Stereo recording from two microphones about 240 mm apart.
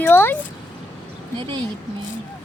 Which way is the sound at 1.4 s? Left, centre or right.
Centre.